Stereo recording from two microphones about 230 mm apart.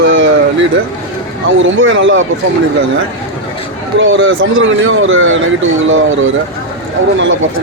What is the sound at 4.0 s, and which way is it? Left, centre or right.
Speech, right.